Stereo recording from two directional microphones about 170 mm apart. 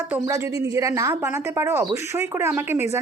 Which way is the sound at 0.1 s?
15° right (ahead or behind).